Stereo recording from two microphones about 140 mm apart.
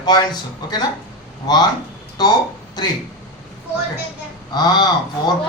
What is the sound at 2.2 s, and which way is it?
Speech, 30° left (ahead or behind).